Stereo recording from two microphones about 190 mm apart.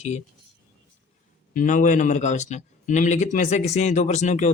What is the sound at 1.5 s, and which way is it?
A man's voice, 45° left (ahead or behind).